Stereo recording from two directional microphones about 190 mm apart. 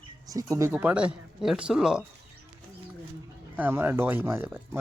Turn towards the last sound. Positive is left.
turn(degrees=-10)  # may be behind; listen again after turning